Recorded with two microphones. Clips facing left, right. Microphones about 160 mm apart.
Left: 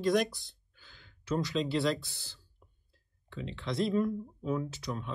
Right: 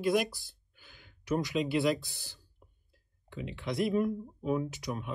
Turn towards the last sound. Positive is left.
turn(degrees=-15)  # may be behind; listen again after turning